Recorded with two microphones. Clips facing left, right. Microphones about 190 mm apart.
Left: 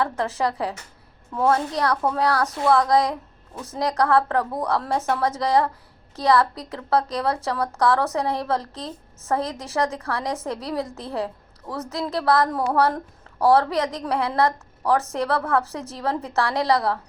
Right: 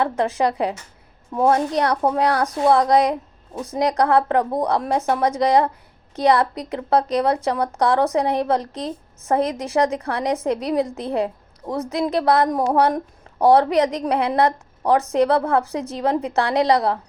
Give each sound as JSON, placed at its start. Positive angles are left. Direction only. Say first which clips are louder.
{"t": 0.0, "sound": "a woman's voice", "louder": "right 4 dB", "side_deg": -20}